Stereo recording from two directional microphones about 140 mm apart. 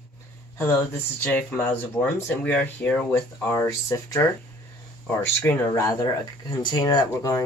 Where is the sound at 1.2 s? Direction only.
10° left (ahead or behind).